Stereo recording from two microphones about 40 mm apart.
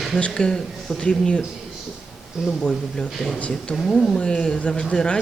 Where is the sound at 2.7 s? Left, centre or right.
Centre.